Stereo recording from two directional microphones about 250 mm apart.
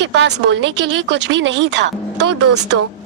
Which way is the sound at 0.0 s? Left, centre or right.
Right.